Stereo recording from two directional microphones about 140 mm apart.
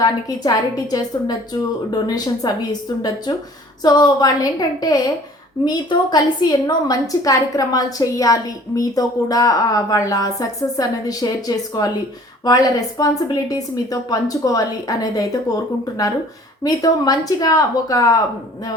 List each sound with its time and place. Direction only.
0.0 s a woman's voice: 25° left (ahead or behind)
16.6 s a woman's voice: 25° left (ahead or behind)